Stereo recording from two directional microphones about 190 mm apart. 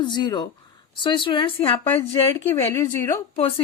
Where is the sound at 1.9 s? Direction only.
15° left (ahead or behind).